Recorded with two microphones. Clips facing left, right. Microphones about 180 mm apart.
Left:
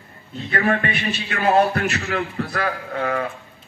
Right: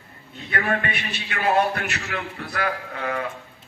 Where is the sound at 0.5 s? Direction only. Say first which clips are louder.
Left 4 dB; 40° left (ahead or behind).